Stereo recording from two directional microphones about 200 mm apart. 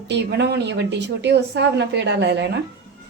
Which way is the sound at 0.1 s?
55° right (ahead or behind).